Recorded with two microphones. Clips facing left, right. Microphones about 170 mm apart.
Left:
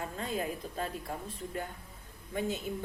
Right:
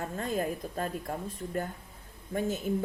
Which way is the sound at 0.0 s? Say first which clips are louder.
Right 4 dB; 45° right (ahead or behind).